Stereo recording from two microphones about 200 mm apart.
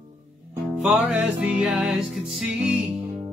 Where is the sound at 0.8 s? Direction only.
5° right (ahead or behind).